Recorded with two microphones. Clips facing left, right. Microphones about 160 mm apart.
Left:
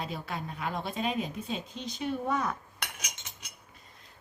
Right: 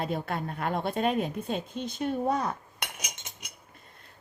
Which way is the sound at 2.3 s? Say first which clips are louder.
Right 2 dB; 30° right (ahead or behind).